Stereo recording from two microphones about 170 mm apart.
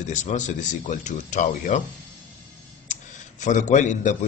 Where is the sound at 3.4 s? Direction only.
45° left (ahead or behind).